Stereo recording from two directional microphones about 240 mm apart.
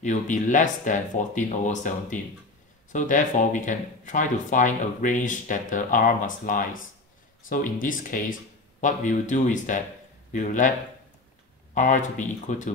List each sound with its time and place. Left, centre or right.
0.0 s speech: left
11.7 s speech: left